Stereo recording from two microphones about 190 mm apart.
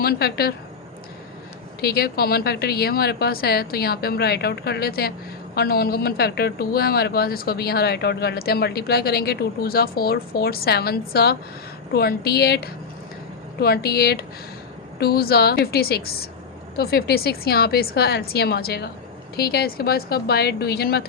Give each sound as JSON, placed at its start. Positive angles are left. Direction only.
{"t": 0.0, "sound": "speech", "side_deg": 55}
{"t": 1.8, "sound": "speech", "side_deg": 55}